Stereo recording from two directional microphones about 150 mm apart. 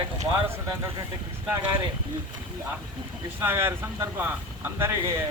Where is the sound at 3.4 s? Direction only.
15° right (ahead or behind).